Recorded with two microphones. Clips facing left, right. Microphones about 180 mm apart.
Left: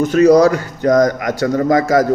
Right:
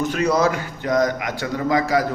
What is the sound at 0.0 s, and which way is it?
A man's voice, 40° left (ahead or behind).